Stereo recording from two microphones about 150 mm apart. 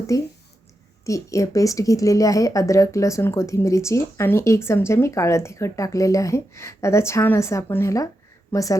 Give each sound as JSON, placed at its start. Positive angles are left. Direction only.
{"t": 0.1, "sound": "a woman's voice", "side_deg": 20}